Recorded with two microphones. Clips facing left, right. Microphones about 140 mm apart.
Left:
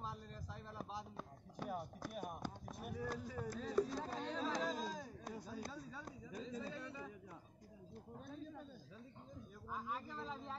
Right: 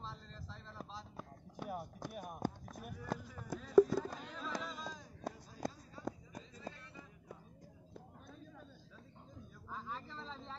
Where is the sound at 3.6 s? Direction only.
35° left (ahead or behind).